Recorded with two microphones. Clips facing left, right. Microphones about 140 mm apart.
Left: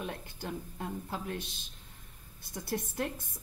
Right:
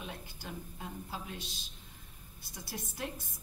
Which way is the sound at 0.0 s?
55° left (ahead or behind).